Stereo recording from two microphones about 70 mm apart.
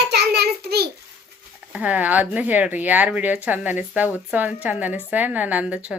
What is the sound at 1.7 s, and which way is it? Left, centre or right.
Speech, right.